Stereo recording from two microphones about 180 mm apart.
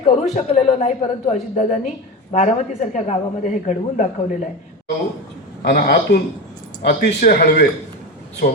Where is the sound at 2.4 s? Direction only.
40° left (ahead or behind).